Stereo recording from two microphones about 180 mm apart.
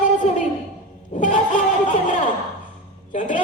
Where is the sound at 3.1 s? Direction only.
45° left (ahead or behind).